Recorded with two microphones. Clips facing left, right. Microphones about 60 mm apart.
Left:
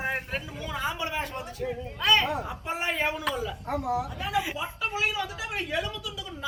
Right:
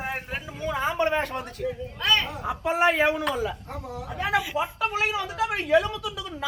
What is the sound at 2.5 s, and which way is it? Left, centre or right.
Speech, right.